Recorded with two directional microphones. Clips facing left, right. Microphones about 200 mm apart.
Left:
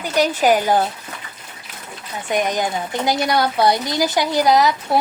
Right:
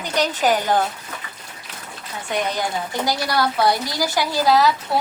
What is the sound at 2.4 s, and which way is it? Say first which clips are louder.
A woman's voice: even; 20° left (ahead or behind).